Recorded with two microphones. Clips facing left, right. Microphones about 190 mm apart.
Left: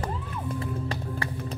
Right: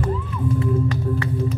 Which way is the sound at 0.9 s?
30° left (ahead or behind).